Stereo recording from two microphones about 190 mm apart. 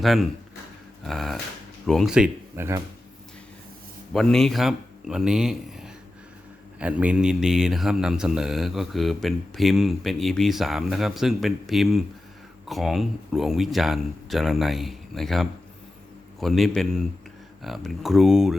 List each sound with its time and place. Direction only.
0.0 s speech: centre (ahead or behind)
4.1 s a man's voice: centre (ahead or behind)